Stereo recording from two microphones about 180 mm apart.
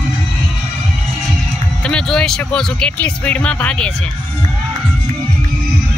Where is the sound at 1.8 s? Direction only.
5° left (ahead or behind).